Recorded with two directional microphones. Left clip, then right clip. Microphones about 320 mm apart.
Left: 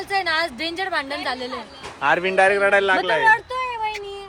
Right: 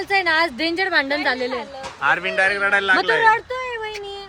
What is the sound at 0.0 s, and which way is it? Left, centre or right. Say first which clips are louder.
A woman's voice: right 3 dB; right.